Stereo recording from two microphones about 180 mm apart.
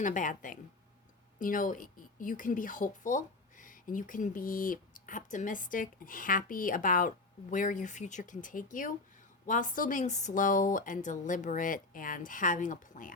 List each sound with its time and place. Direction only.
0.0 s speech: 45° left (ahead or behind)